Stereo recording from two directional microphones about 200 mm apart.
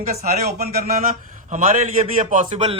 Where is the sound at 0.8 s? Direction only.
40° right (ahead or behind).